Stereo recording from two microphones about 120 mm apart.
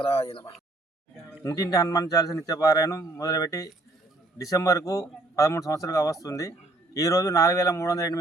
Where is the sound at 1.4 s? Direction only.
30° left (ahead or behind).